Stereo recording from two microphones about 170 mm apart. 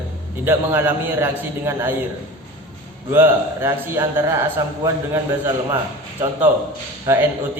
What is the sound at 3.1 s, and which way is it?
A man's voice, 15° right (ahead or behind).